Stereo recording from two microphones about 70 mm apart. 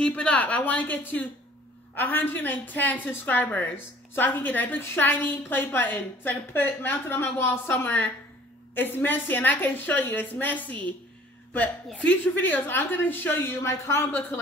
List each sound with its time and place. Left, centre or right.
0.0 s a woman's voice: centre; by 14.0 s left